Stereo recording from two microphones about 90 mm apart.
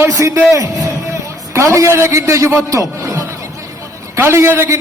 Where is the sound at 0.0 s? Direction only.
35° right (ahead or behind).